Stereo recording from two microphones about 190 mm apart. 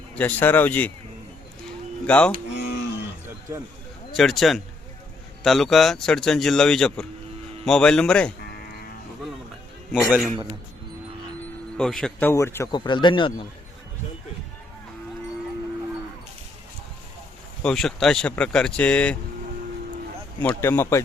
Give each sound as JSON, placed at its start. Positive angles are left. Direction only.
{"t": 0.2, "sound": "speech", "side_deg": 10}
{"t": 2.0, "sound": "speech", "side_deg": 5}
{"t": 4.1, "sound": "speech", "side_deg": 0}
{"t": 8.4, "sound": "livestock", "side_deg": 55}
{"t": 9.9, "sound": "speech", "side_deg": -5}
{"t": 11.8, "sound": "speech", "side_deg": 5}
{"t": 12.3, "sound": "speech", "side_deg": 15}
{"t": 17.6, "sound": "speech", "side_deg": 5}
{"t": 20.4, "sound": "speech", "side_deg": 10}